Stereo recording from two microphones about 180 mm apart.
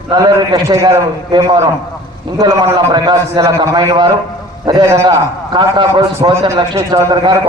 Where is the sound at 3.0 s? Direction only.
25° right (ahead or behind).